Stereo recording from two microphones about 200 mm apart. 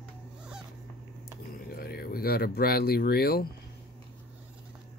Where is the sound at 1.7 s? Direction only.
50° left (ahead or behind).